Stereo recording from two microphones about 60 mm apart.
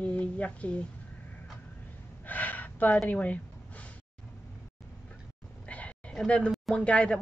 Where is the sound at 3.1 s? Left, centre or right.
Left.